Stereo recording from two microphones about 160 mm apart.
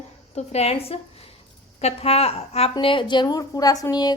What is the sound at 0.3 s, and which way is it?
A woman's voice, 40° left (ahead or behind).